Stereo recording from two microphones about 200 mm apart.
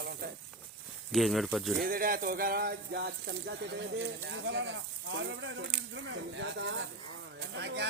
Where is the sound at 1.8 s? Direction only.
45° right (ahead or behind).